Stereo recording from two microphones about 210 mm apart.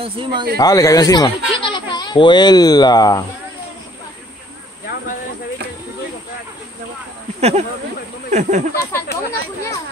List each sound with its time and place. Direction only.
0.0 s speech: 25° right (ahead or behind)
0.6 s speech: 15° left (ahead or behind)
7.3 s speech: 30° right (ahead or behind)
8.9 s speech: 15° left (ahead or behind)